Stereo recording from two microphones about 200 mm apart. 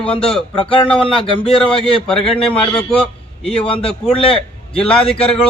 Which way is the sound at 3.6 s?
25° left (ahead or behind).